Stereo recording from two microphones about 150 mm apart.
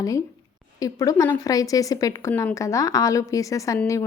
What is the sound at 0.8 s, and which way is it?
A woman's voice, 25° left (ahead or behind).